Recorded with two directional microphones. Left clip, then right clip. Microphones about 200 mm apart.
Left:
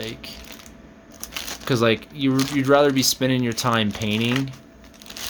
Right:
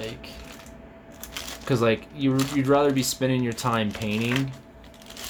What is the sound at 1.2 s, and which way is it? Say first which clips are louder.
Speech: left 4 dB; 25° left (ahead or behind).